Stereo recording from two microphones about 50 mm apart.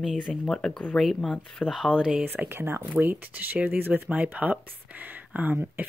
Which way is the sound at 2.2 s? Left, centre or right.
Right.